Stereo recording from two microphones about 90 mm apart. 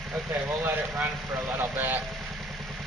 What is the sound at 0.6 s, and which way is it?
Speech, 25° right (ahead or behind).